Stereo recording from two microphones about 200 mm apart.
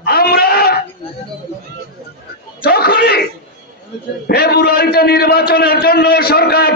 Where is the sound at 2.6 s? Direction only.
50° left (ahead or behind).